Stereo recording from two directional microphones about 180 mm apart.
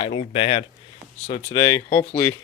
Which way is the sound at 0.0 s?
35° left (ahead or behind).